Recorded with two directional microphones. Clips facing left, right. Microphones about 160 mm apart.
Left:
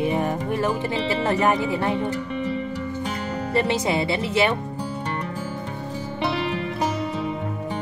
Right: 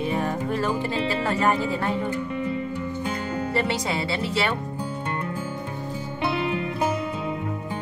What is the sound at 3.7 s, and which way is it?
Speech, 20° left (ahead or behind).